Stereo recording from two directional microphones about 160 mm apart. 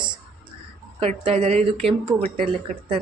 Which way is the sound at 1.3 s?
40° right (ahead or behind).